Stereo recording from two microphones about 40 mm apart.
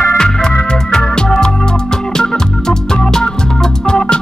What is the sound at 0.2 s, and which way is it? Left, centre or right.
Music, centre.